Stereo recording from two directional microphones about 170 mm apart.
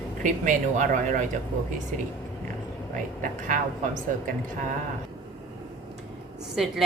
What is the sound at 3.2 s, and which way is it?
Speech, 50° right (ahead or behind).